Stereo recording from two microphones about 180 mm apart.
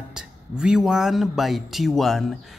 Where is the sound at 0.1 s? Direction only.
5° right (ahead or behind).